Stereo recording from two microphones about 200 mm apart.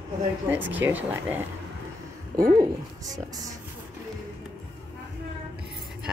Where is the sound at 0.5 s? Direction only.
10° right (ahead or behind).